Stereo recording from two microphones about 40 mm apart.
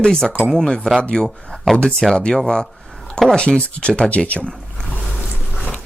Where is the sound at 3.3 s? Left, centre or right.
Left.